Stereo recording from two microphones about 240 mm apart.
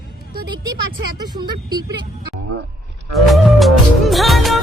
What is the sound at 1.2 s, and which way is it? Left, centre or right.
Speech, centre.